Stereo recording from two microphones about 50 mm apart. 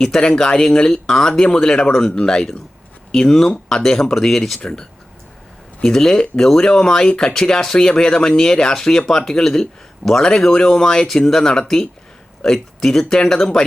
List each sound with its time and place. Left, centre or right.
0.0 s speech: centre
4.6 s speech: centre